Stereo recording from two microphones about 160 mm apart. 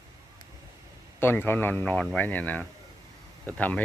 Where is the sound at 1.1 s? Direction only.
15° left (ahead or behind).